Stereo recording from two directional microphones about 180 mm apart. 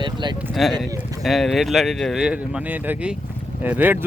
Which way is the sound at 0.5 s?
Centre (ahead or behind).